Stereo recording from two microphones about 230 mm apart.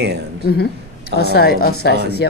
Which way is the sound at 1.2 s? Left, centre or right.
Left.